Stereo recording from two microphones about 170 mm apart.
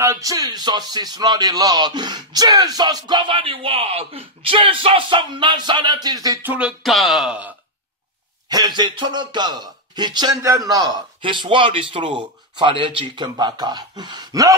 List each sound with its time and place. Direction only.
0.0 s speech: 20° right (ahead or behind)
6.4 s speech: 5° right (ahead or behind)
8.5 s speech: 25° right (ahead or behind)